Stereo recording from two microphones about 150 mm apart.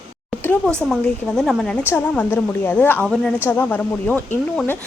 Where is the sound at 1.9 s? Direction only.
15° left (ahead or behind).